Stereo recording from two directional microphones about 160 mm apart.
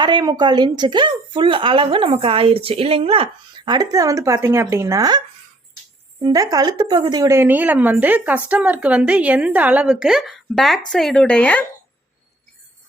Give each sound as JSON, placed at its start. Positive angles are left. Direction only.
{"t": 0.0, "sound": "a woman's voice", "side_deg": -25}
{"t": 6.2, "sound": "a woman's voice", "side_deg": -20}